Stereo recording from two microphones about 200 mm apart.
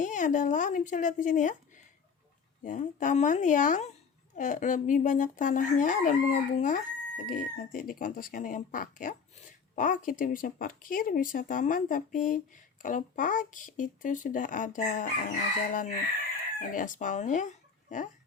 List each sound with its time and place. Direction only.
0.0 s speech: 40° left (ahead or behind)